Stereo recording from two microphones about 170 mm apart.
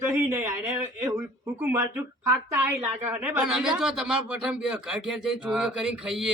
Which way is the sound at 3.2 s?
10° right (ahead or behind).